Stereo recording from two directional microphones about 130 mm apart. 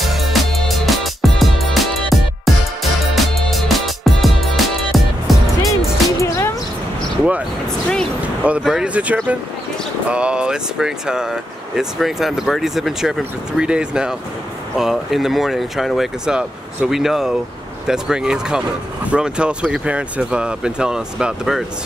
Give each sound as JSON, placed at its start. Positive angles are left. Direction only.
{"t": 0.0, "sound": "music", "side_deg": 0}
{"t": 6.1, "sound": "music", "side_deg": 20}
{"t": 8.4, "sound": "speech", "side_deg": -10}